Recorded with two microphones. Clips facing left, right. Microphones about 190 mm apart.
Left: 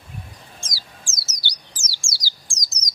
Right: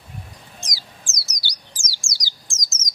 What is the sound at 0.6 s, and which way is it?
Bird, 20° right (ahead or behind).